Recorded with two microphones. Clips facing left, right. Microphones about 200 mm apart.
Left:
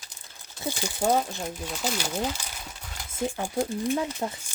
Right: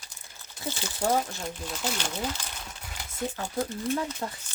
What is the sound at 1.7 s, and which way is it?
Speech, 5° left (ahead or behind).